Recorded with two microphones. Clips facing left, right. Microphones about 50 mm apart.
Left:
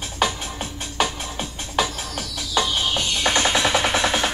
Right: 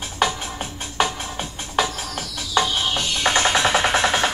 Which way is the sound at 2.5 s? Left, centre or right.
Centre.